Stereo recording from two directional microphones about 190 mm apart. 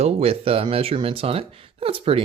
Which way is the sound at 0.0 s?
30° right (ahead or behind).